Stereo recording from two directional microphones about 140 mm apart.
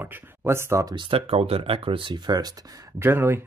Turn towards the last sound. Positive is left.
turn(degrees=-15)  # may be behind; listen again after turning